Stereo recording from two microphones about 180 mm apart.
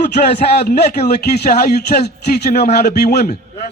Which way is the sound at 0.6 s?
60° left (ahead or behind).